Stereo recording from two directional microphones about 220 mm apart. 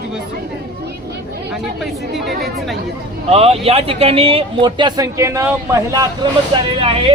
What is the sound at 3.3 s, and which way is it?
Speech, 25° right (ahead or behind).